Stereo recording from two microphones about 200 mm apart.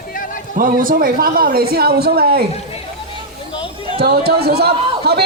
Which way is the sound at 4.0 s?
50° right (ahead or behind).